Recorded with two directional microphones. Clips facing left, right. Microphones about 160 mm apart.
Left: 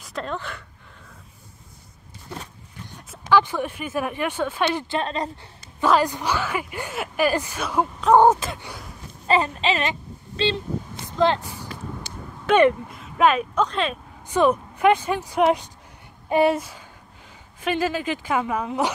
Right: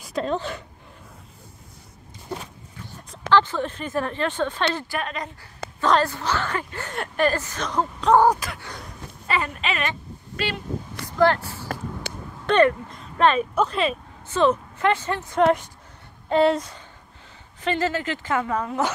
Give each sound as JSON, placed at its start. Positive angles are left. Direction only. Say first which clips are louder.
{"t": 0.0, "sound": "speech", "louder": "right 5 dB", "side_deg": -20}
{"t": 3.0, "sound": "speech", "louder": "even", "side_deg": 5}
{"t": 4.7, "sound": "a woman's voice", "louder": "left 4 dB", "side_deg": 25}
{"t": 5.8, "sound": "speech", "louder": "left 1 dB", "side_deg": 10}
{"t": 8.2, "sound": "a woman's voice", "louder": "left 3 dB", "side_deg": 25}
{"t": 8.6, "sound": "gasp", "louder": "even", "side_deg": 5}
{"t": 9.3, "sound": "speech", "louder": "left 5 dB", "side_deg": 30}
{"t": 12.6, "sound": "speech", "louder": "left 3 dB", "side_deg": 10}
{"t": 14.2, "sound": "speech", "louder": "left 1 dB", "side_deg": 15}